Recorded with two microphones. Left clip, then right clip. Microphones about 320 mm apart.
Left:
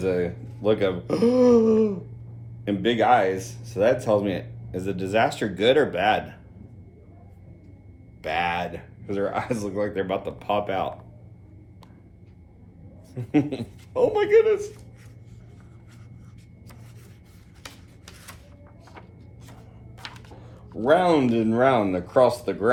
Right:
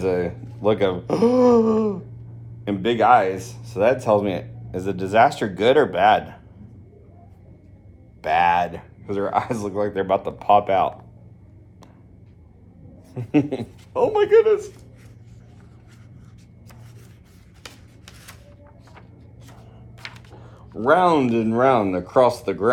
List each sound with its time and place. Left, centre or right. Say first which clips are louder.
0.0 s speech: right 2 dB; centre
8.2 s speech: right 8 dB; centre
13.1 s speech: right 3 dB; centre
20.4 s speech: right 4 dB; centre